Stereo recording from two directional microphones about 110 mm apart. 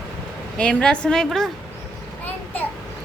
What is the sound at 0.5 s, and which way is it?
Speech, 10° left (ahead or behind).